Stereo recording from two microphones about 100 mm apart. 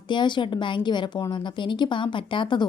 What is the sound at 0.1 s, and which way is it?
A woman's voice, 50° left (ahead or behind).